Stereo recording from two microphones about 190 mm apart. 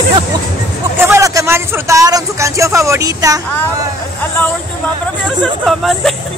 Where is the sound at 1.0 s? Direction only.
15° right (ahead or behind).